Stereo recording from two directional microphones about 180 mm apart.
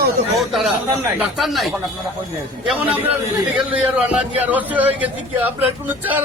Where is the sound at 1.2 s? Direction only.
Centre (ahead or behind).